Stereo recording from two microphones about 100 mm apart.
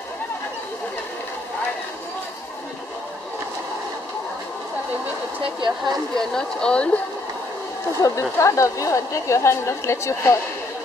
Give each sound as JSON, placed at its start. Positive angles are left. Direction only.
{"t": 6.1, "sound": "speech", "side_deg": 5}
{"t": 8.0, "sound": "a woman's voice", "side_deg": 30}